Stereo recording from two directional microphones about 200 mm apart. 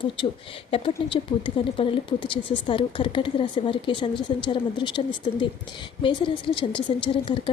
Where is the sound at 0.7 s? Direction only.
25° left (ahead or behind).